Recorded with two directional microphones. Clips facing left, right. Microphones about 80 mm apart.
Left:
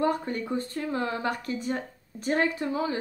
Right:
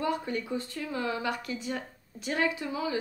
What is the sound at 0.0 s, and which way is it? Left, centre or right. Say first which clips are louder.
A woman's voice: left 4 dB; left.